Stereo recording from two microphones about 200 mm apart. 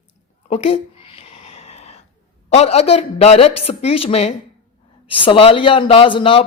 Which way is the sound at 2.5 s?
30° left (ahead or behind).